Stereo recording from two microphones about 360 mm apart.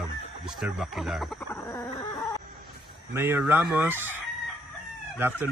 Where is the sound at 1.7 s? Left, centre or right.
Centre.